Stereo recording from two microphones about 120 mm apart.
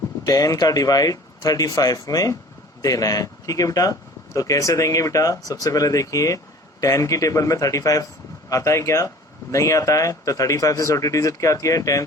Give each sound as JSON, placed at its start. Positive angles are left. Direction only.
{"t": 0.3, "sound": "speech", "side_deg": 30}